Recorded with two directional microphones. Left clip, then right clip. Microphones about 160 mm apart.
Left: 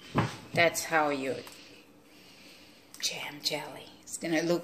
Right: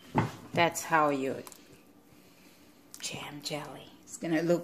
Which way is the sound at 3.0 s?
65° right (ahead or behind).